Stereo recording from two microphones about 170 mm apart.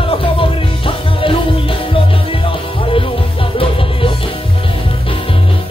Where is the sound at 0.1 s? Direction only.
30° left (ahead or behind).